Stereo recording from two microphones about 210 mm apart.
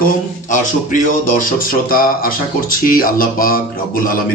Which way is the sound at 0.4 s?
40° left (ahead or behind).